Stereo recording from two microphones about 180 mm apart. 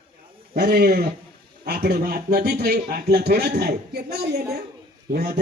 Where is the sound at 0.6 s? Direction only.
60° right (ahead or behind).